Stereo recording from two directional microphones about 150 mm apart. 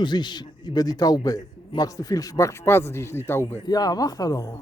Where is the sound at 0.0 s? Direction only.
30° left (ahead or behind).